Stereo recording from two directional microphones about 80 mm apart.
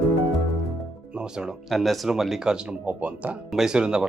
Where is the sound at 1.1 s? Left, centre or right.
Centre.